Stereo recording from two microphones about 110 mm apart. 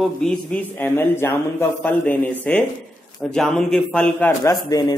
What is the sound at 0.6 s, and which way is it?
A man's voice, 20° left (ahead or behind).